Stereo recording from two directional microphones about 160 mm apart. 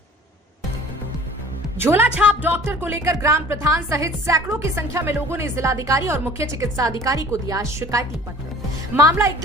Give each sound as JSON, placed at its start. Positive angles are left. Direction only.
{"t": 1.8, "sound": "speech", "side_deg": -15}